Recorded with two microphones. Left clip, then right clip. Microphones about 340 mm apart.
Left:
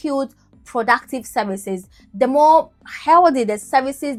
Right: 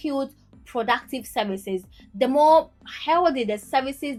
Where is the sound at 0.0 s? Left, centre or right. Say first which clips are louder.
Left 5 dB; left.